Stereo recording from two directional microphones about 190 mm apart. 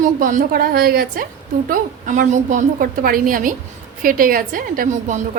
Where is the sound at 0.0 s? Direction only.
45° right (ahead or behind).